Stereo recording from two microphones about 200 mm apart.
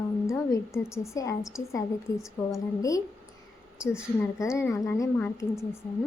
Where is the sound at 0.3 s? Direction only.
15° left (ahead or behind).